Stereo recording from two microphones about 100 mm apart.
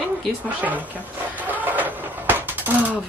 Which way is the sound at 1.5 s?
15° right (ahead or behind).